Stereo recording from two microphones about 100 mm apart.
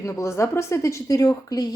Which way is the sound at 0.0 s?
30° left (ahead or behind).